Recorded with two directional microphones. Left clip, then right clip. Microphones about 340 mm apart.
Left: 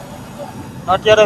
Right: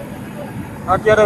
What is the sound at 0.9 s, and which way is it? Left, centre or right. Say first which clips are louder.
Speech: left 2 dB; centre.